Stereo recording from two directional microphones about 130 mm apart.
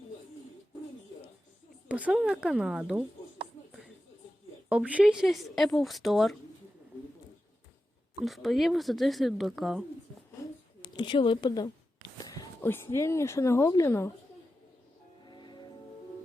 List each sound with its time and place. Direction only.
1.9 s speech: 10° right (ahead or behind)
4.7 s speech: 10° right (ahead or behind)
8.2 s speech: centre (ahead or behind)
10.8 s speech: 40° left (ahead or behind)
12.1 s a sound: 30° left (ahead or behind)
12.6 s speech: 20° left (ahead or behind)
15.2 s music: 35° left (ahead or behind)